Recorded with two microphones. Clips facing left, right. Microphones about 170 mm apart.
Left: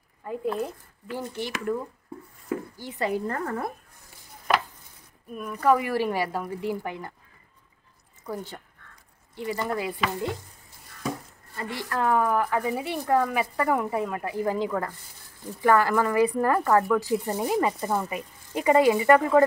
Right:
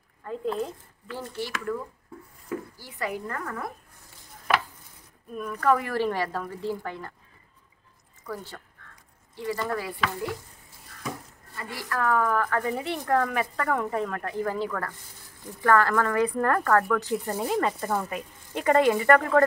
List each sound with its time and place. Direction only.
0.2 s a woman's voice: 10° left (ahead or behind); by 3.7 s 30° left (ahead or behind)
5.3 s speech: 10° left (ahead or behind)
8.3 s a woman's voice: 20° left (ahead or behind)
11.5 s speech: 25° left (ahead or behind)